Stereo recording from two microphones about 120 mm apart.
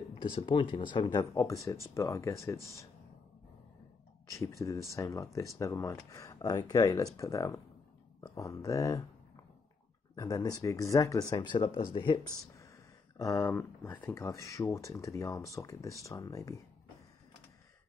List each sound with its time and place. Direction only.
0.5 s speech: 45° left (ahead or behind)
1.3 s speech: 25° left (ahead or behind)
4.3 s speech: 25° left (ahead or behind)
10.1 s speech: 30° left (ahead or behind)
13.4 s speech: 20° left (ahead or behind)